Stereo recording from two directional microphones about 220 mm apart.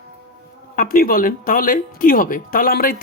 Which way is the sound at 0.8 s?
40° left (ahead or behind).